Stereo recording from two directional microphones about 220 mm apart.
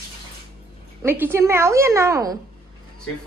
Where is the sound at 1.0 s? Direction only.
10° right (ahead or behind).